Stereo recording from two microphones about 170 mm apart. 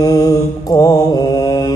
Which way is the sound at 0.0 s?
20° left (ahead or behind).